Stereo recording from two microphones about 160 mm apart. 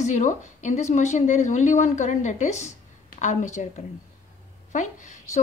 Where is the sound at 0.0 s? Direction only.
50° left (ahead or behind).